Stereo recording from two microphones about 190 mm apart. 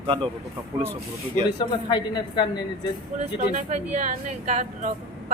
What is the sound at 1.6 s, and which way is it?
Speech, 25° left (ahead or behind).